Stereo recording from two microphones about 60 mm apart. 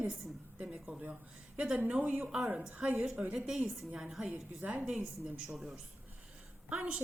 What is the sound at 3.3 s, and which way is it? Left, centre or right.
Speech, centre.